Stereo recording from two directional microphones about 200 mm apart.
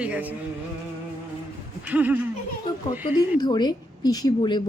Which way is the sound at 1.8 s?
10° right (ahead or behind).